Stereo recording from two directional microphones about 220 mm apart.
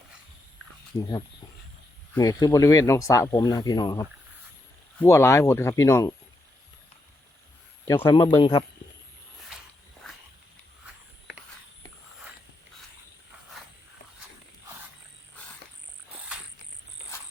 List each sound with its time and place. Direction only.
2.1 s speech: 15° left (ahead or behind)
7.9 s speech: 20° left (ahead or behind)